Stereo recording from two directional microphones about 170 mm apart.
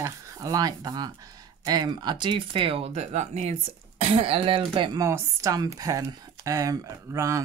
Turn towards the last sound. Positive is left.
turn(degrees=-20)  # may be behind; listen again after turning